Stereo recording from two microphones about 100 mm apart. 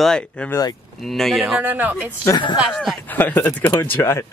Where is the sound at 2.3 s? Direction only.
50° left (ahead or behind).